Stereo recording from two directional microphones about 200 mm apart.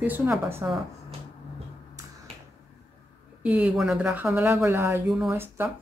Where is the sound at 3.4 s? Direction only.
5° right (ahead or behind).